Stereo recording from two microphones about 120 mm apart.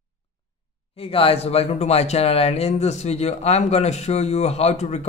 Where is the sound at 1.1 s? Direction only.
55° left (ahead or behind).